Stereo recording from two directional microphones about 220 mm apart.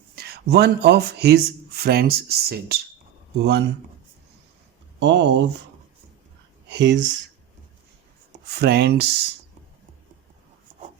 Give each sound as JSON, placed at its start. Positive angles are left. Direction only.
{"t": 0.2, "sound": "speech", "side_deg": -45}
{"t": 4.9, "sound": "speech", "side_deg": -50}
{"t": 6.7, "sound": "speech", "side_deg": -50}
{"t": 8.4, "sound": "speech", "side_deg": -45}